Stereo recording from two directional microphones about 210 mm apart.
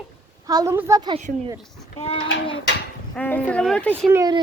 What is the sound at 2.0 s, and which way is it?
Speech, 30° left (ahead or behind).